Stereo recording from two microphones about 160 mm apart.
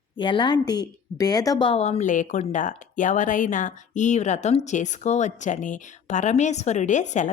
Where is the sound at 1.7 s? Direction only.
45° left (ahead or behind).